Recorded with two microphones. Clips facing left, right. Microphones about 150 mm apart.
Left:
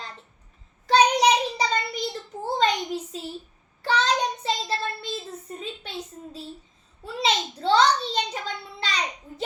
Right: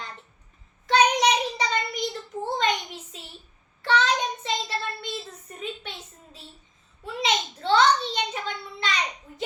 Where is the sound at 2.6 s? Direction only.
35° left (ahead or behind).